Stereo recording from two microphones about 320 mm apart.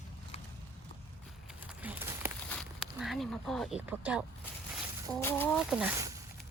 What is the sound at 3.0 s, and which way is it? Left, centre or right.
Speech, centre.